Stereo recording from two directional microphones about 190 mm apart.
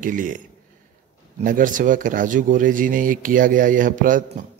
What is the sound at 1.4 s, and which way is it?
Speech, 45° right (ahead or behind).